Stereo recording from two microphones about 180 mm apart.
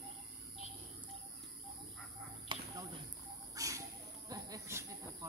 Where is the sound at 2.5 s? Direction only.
25° right (ahead or behind).